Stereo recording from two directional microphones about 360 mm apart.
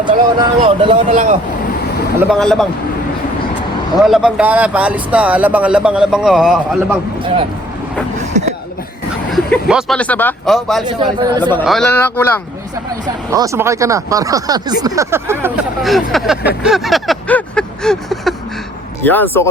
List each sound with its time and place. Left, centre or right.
0.0 s speech: centre
2.3 s speech: centre
4.0 s speech: centre
8.2 s a sound: centre
9.3 s speech: centre
10.8 s speech: centre
11.5 s speech: centre
13.1 s speech: centre
16.5 s a sound: centre
19.0 s speech: centre